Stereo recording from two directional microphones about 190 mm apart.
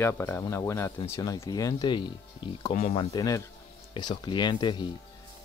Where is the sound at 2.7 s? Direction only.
35° left (ahead or behind).